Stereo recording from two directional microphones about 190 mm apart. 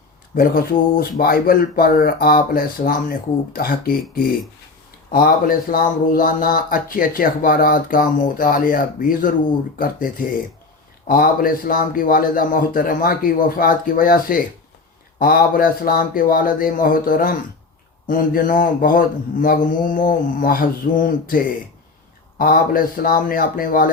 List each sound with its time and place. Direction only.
0.3 s speech: 50° left (ahead or behind)
5.1 s speech: 50° left (ahead or behind)